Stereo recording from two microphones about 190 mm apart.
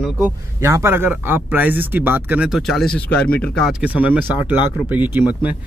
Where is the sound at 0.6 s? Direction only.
15° right (ahead or behind).